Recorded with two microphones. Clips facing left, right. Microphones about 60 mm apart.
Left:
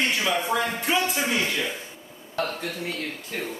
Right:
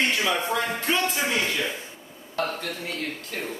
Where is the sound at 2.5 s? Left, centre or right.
Centre.